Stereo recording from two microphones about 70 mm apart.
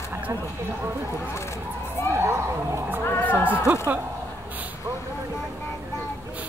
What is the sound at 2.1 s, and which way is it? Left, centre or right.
Speech, right.